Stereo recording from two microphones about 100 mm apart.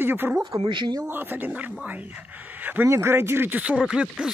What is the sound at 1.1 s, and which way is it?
Speech, 20° right (ahead or behind).